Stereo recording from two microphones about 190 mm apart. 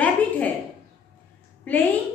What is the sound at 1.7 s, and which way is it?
Speech, 10° left (ahead or behind).